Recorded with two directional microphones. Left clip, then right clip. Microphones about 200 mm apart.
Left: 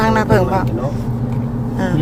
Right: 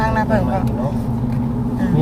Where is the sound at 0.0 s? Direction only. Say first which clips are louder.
Left 4 dB; 30° left (ahead or behind).